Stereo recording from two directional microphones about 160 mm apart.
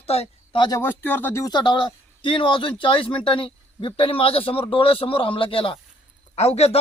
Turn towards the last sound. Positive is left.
turn(degrees=40)  # may be behind; listen again after turning